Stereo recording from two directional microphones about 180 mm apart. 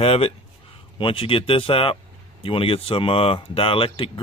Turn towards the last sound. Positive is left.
turn(degrees=30)  # may be behind; listen again after turning